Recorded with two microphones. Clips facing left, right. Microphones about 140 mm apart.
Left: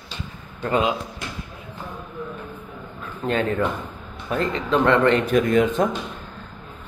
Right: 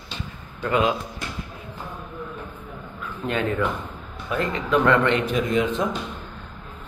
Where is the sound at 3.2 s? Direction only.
40° left (ahead or behind).